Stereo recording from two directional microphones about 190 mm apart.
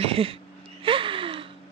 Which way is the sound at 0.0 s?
30° right (ahead or behind).